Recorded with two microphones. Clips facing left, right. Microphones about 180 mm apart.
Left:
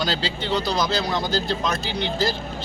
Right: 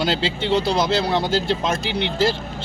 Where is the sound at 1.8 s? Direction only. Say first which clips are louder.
Right 3 dB; 70° right (ahead or behind).